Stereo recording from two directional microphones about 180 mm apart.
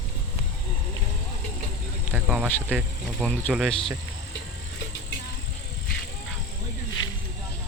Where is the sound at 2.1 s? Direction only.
5° right (ahead or behind).